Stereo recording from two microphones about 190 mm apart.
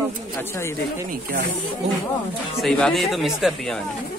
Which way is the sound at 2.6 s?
Centre (ahead or behind).